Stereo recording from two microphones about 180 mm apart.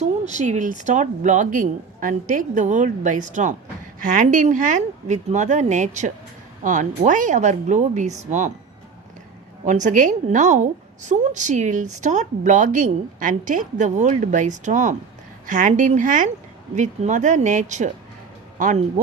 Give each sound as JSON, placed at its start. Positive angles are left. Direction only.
{"t": 0.0, "sound": "a woman's voice", "side_deg": -40}
{"t": 9.6, "sound": "a woman's voice", "side_deg": -45}